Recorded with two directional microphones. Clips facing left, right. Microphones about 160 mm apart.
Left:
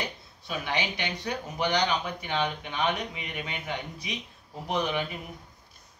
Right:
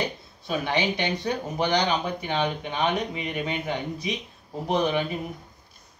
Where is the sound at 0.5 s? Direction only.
30° right (ahead or behind).